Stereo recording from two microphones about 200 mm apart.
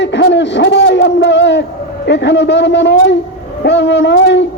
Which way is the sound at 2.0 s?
60° left (ahead or behind).